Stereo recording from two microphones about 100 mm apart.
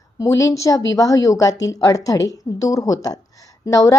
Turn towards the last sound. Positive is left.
turn(degrees=35)  # may be behind; listen again after turning